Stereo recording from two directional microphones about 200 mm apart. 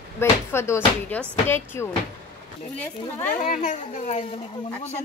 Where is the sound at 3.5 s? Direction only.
40° left (ahead or behind).